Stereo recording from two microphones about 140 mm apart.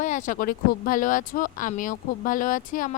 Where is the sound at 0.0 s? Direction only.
60° left (ahead or behind).